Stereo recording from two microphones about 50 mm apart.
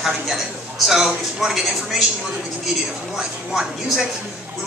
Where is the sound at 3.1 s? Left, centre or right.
Centre.